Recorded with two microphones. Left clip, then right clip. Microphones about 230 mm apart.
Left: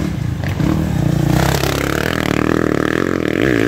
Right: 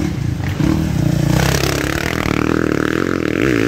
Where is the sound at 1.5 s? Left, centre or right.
Centre.